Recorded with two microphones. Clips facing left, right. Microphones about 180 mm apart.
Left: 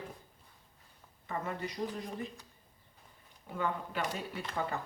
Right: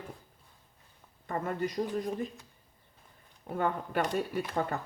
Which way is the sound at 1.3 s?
50° right (ahead or behind).